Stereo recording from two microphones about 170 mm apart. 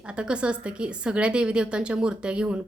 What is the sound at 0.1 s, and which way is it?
A woman's voice, 5° right (ahead or behind).